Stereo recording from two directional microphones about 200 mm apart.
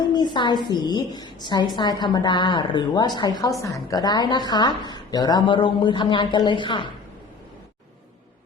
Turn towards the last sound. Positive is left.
turn(degrees=25)  # may be behind; listen again after turning